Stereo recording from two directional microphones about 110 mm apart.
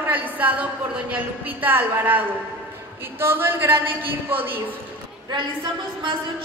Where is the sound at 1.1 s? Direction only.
15° right (ahead or behind).